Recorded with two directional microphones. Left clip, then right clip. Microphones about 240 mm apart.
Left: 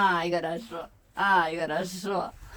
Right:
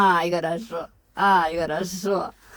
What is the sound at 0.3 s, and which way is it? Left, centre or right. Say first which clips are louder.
Speech: right 4 dB; right.